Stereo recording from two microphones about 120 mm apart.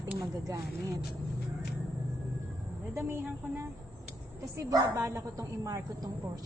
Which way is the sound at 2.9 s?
20° right (ahead or behind).